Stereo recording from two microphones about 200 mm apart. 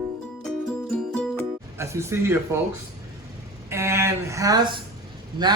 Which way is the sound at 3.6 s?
15° right (ahead or behind).